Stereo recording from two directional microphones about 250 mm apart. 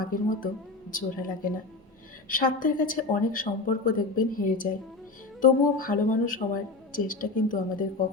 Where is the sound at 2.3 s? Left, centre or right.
Left.